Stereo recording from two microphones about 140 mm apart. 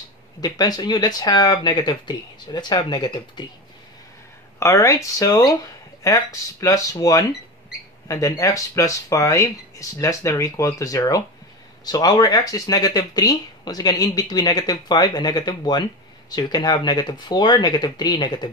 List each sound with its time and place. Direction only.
0.4 s speech: 30° left (ahead or behind)
4.6 s speech: 20° left (ahead or behind)